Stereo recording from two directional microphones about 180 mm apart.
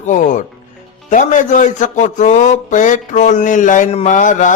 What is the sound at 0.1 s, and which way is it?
A man's voice, 45° left (ahead or behind).